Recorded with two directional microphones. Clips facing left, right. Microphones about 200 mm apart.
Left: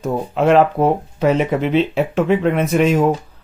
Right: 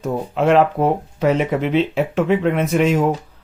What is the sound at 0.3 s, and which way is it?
Speech, 40° left (ahead or behind).